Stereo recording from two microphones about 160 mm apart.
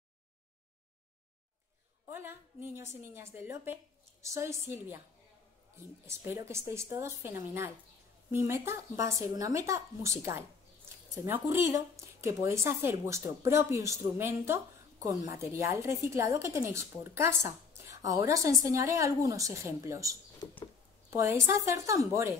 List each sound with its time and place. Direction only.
2.0 s speech: 15° right (ahead or behind)
6.0 s speech: 15° right (ahead or behind)